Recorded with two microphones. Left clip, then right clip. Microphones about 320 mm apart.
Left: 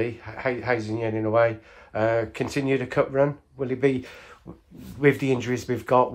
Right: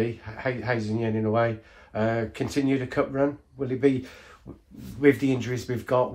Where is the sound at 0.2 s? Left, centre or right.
Left.